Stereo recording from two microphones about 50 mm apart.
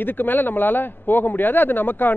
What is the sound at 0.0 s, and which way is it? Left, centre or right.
A man's voice, left.